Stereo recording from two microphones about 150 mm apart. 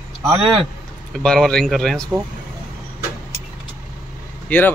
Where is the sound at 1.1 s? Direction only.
5° left (ahead or behind).